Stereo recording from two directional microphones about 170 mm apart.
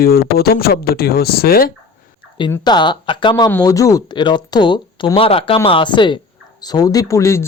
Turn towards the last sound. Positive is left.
turn(degrees=20)  # may be behind; listen again after turning